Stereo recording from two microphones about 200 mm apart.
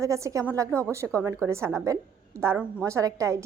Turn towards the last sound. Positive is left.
turn(degrees=-15)  # may be behind; listen again after turning